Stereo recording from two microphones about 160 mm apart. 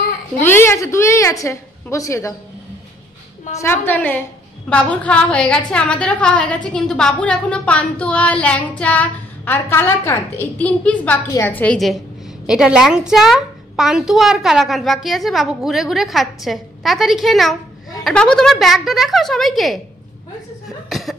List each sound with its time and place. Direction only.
0.4 s a woman's voice: 15° left (ahead or behind)
3.5 s a woman's voice: 15° left (ahead or behind)
20.6 s cough: centre (ahead or behind)